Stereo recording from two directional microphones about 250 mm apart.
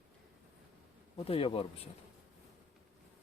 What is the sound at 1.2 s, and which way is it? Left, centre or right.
Speech, left.